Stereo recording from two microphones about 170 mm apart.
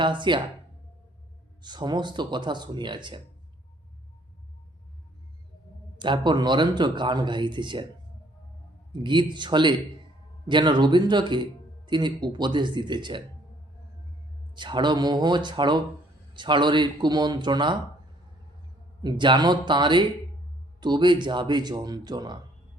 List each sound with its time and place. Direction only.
0.0 s speech: 25° right (ahead or behind)
1.6 s speech: 25° right (ahead or behind)
6.0 s speech: 25° right (ahead or behind)
8.9 s speech: 25° right (ahead or behind)
14.5 s speech: 25° right (ahead or behind)
19.0 s speech: 25° right (ahead or behind)